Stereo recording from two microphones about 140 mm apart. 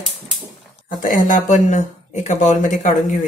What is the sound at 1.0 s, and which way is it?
Speech, 65° left (ahead or behind).